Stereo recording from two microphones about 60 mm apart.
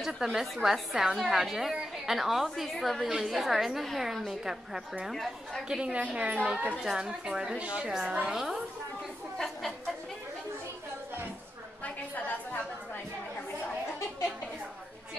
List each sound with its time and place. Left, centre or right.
0.0 s a woman's voice: centre
5.1 s a woman's voice: centre
5.7 s a woman's voice: centre
6.1 s speech: right
6.8 s a woman's voice: centre
8.3 s a woman's voice: centre
9.4 s speech: centre